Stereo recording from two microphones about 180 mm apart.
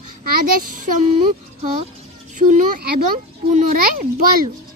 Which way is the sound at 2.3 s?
50° right (ahead or behind).